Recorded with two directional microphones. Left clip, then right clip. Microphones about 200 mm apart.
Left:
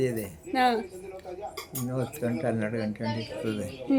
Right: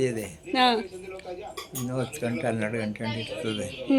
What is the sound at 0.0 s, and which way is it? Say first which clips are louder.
Speech: right 1 dB; 15° left (ahead or behind).